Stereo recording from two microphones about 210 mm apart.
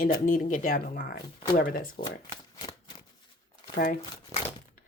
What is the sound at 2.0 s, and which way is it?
Speech, 20° left (ahead or behind).